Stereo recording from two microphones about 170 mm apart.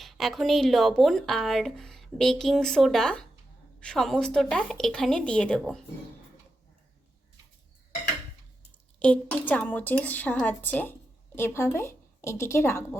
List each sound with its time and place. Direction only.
0.0 s speech: centre (ahead or behind)
9.0 s a woman's voice: 10° left (ahead or behind)